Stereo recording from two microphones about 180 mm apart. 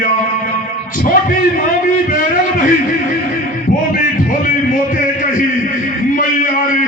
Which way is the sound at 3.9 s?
50° left (ahead or behind).